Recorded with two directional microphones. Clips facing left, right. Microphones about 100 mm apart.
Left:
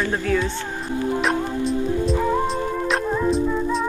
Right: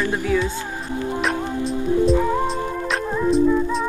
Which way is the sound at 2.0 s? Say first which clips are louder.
Right 5 dB; centre (ahead or behind).